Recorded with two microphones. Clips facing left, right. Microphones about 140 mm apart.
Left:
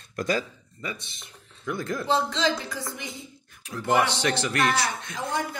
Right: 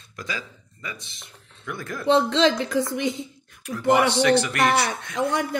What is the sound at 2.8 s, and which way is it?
Speech, 20° right (ahead or behind).